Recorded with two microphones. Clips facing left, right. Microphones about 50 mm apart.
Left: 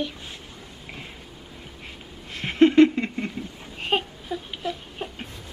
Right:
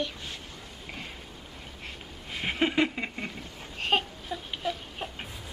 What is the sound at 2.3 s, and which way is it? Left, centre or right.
Babbling, centre.